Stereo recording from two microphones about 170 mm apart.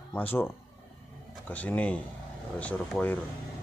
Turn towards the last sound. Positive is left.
turn(degrees=10)  # may be behind; listen again after turning